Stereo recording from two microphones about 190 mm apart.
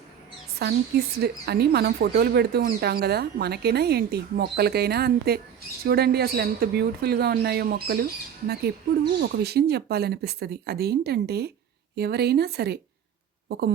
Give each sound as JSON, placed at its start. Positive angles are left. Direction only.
{"t": 0.6, "sound": "speech", "side_deg": -60}
{"t": 9.2, "sound": "speech", "side_deg": -55}